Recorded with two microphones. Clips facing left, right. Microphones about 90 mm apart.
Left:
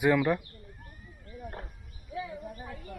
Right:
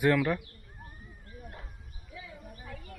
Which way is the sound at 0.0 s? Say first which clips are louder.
Left 1 dB; 5° left (ahead or behind).